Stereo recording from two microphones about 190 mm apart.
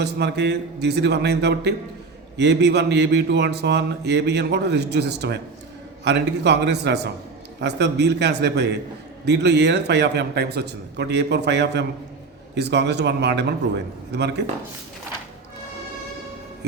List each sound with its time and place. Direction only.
0.0 s speech: 60° right (ahead or behind)